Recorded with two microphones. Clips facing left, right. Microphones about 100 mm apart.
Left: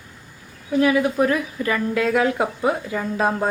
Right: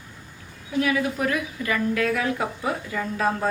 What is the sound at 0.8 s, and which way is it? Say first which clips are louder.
A woman's voice: left 6 dB; 30° left (ahead or behind).